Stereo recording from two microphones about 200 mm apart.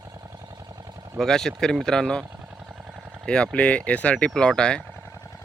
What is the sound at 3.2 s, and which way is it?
Speech, 5° left (ahead or behind).